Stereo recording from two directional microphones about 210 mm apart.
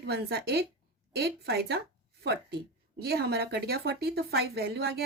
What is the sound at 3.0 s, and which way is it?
A woman's voice, 50° right (ahead or behind).